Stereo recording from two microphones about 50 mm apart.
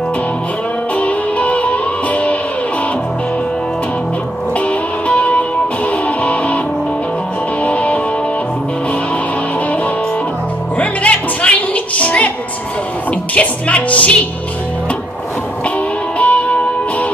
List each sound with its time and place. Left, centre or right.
0.9 s music: left
4.6 s music: left
7.6 s music: left
10.8 s music: left
13.3 s music: left
16.2 s music: left